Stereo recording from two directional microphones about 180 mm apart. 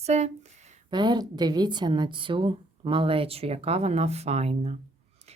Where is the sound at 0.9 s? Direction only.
25° right (ahead or behind).